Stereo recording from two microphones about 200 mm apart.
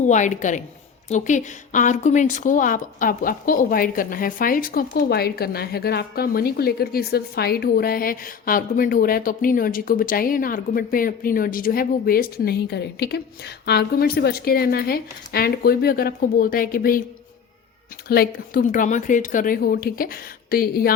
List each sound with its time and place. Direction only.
0.0 s a woman's voice: 40° left (ahead or behind)
18.1 s speech: 50° left (ahead or behind)